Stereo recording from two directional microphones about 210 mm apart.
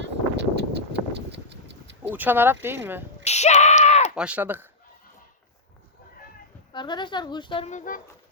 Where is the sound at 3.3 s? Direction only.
30° left (ahead or behind).